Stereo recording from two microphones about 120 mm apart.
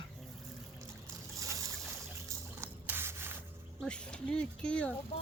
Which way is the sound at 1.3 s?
25° right (ahead or behind).